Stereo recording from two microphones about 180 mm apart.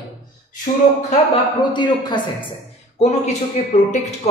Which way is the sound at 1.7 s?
25° left (ahead or behind).